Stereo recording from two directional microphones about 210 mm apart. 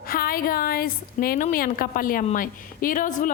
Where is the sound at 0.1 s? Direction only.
45° left (ahead or behind).